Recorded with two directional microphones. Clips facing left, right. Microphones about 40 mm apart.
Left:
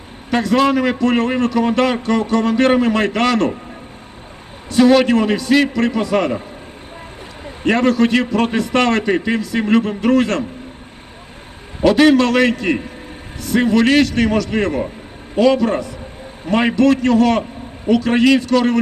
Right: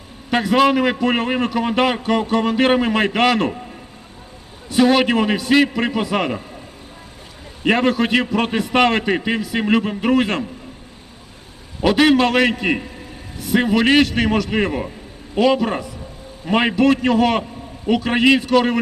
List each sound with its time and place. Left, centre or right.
0.3 s a man's voice: centre
4.7 s a man's voice: centre
7.6 s a man's voice: centre
11.8 s a man's voice: centre